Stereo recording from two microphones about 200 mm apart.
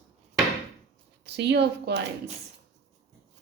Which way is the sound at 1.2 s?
60° right (ahead or behind).